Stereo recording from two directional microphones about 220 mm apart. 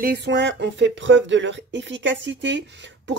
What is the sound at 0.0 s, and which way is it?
Speech, 50° right (ahead or behind).